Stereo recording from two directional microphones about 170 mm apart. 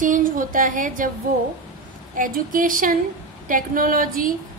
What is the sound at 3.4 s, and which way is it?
Speech, 55° right (ahead or behind).